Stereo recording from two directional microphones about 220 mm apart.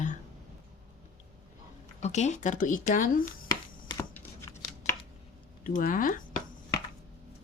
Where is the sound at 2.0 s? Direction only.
30° left (ahead or behind).